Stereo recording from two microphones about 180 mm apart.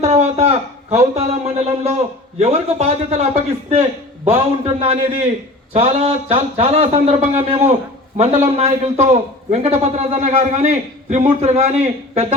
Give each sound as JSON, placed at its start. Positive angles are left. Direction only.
{"t": 0.0, "sound": "a man's voice", "side_deg": -35}